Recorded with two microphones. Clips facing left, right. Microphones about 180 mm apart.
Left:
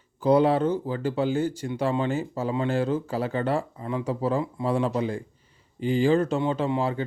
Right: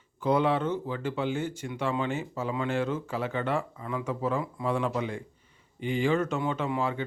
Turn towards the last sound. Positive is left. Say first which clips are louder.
# left 4 dB
turn(degrees=35)  # may be behind; listen again after turning